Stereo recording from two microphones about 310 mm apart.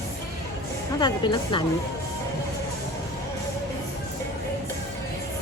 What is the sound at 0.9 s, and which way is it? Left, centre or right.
Speech, centre.